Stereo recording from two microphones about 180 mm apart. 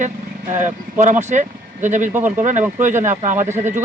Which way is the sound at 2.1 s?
10° right (ahead or behind).